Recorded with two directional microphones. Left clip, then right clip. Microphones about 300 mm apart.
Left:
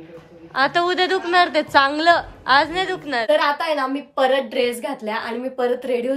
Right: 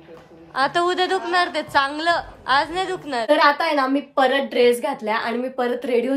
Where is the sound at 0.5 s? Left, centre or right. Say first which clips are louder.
Left 1 dB; centre.